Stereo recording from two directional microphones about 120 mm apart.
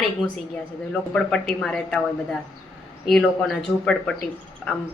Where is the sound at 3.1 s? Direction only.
5° left (ahead or behind).